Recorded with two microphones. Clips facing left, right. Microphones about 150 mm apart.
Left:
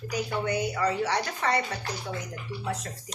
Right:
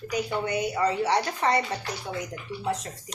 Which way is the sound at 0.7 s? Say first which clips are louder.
Right 3 dB; 30° right (ahead or behind).